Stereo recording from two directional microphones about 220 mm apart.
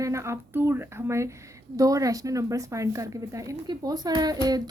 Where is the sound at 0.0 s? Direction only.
15° right (ahead or behind).